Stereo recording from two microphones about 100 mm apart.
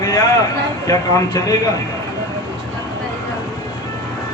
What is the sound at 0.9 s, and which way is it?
Speech, 35° left (ahead or behind).